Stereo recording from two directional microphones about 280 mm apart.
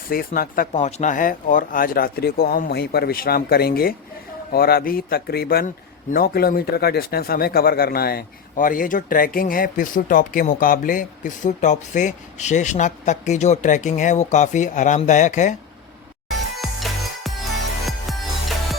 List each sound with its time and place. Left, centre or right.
0.1 s a man's voice: left
16.6 s music: centre